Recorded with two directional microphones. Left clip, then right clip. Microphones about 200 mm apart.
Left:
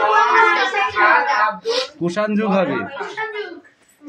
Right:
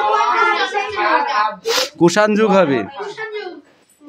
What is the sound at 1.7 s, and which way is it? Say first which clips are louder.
Speech: right 6 dB; 50° right (ahead or behind).